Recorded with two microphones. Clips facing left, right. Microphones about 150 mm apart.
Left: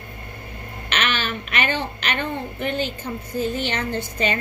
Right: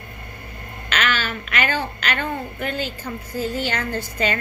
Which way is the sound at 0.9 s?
25° left (ahead or behind).